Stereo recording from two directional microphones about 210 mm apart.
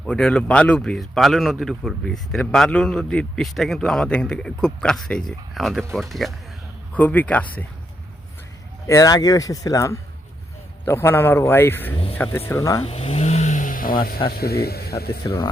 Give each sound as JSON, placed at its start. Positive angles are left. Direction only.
{"t": 0.0, "sound": "speech", "side_deg": 5}
{"t": 8.9, "sound": "speech", "side_deg": 15}
{"t": 12.8, "sound": "vehicle", "side_deg": 30}
{"t": 14.3, "sound": "speech", "side_deg": 50}
{"t": 15.2, "sound": "speech", "side_deg": 20}